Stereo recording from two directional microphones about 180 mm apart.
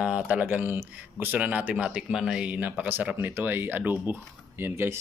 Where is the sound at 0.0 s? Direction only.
5° right (ahead or behind).